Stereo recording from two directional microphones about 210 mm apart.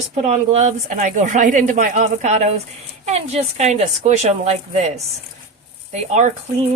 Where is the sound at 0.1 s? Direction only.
35° right (ahead or behind).